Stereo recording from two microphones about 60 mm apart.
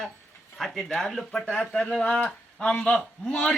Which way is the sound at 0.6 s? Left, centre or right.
Centre.